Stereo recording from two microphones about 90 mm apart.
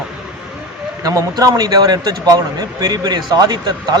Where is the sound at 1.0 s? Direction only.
40° right (ahead or behind).